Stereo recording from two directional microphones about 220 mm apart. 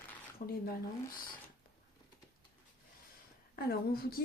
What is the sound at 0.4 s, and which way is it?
Speech, 35° left (ahead or behind).